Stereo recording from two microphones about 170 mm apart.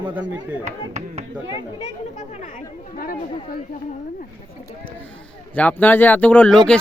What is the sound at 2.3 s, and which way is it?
Speech, 45° left (ahead or behind).